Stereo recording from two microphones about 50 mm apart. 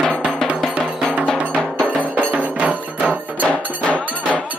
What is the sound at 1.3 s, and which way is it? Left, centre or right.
Music, right.